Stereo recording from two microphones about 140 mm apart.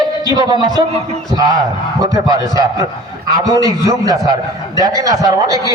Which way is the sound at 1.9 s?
25° right (ahead or behind).